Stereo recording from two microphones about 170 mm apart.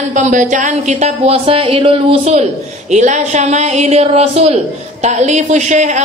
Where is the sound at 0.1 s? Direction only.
45° right (ahead or behind).